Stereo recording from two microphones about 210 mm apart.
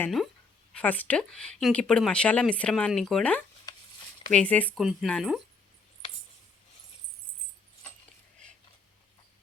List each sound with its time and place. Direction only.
0.0 s speech: centre (ahead or behind)
3.7 s a sound: 20° left (ahead or behind)
4.3 s speech: 5° left (ahead or behind)